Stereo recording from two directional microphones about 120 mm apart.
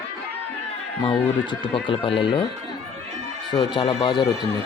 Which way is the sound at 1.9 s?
45° left (ahead or behind).